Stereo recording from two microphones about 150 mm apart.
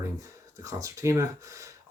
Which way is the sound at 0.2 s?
20° right (ahead or behind).